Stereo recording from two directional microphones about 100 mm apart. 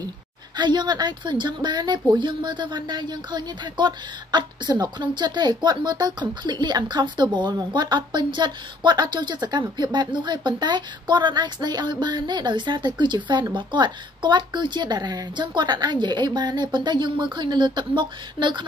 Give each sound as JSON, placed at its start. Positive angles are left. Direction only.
{"t": 0.6, "sound": "a woman's voice", "side_deg": -45}